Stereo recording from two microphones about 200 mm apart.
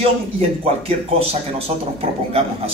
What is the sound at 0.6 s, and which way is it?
A man's voice, 30° right (ahead or behind).